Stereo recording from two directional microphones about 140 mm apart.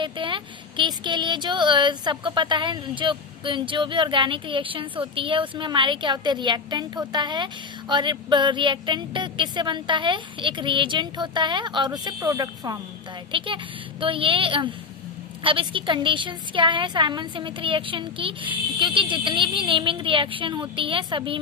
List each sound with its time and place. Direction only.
0.0 s speech: 35° right (ahead or behind)
13.3 s speech: 35° right (ahead or behind)